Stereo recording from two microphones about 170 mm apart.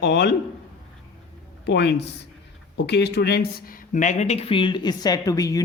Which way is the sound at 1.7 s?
85° left.